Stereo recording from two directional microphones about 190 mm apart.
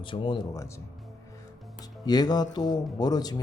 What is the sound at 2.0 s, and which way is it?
Speech, 20° left (ahead or behind).